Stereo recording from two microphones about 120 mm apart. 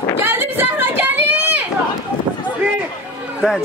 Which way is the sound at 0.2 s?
15° right (ahead or behind).